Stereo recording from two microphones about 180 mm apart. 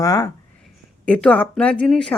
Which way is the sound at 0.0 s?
20° left (ahead or behind).